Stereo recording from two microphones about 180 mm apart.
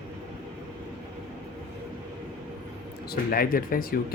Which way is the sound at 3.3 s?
50° left (ahead or behind).